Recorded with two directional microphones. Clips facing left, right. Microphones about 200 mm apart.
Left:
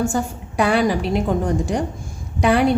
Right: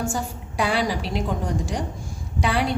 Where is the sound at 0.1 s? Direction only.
55° left (ahead or behind).